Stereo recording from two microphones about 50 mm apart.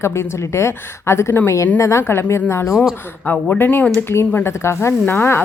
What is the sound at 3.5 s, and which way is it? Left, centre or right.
Speech, left.